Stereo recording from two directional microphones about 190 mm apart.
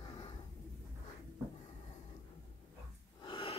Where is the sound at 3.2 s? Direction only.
25° left (ahead or behind).